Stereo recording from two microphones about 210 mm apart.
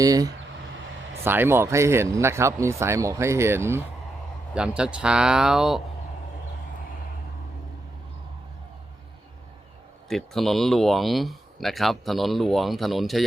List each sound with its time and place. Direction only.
0.0 s speech: 15° right (ahead or behind)
10.1 s speech: centre (ahead or behind)